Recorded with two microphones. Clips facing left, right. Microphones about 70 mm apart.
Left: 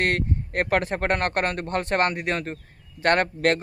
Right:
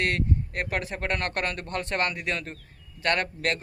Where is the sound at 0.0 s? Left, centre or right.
Left.